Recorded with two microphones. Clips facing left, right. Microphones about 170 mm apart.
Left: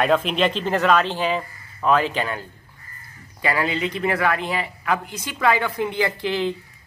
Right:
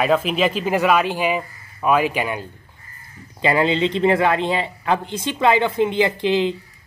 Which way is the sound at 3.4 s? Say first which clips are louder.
Right 5 dB; 25° right (ahead or behind).